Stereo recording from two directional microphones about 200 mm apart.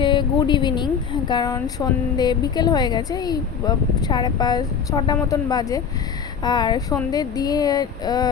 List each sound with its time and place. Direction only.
0.0 s a woman's voice: 25° left (ahead or behind)